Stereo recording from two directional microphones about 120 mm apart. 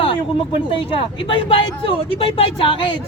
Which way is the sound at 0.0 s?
45° left (ahead or behind).